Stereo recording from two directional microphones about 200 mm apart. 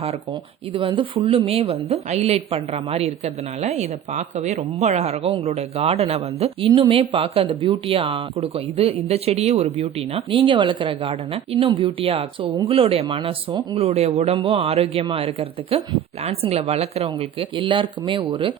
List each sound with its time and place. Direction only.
0.7 s a woman's voice: 25° right (ahead or behind)